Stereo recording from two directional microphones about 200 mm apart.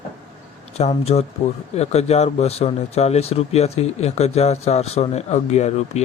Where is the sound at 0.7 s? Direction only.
30° left (ahead or behind).